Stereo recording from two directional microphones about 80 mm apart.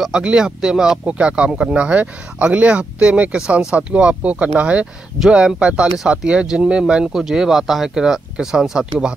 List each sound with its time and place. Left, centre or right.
0.0 s speech: centre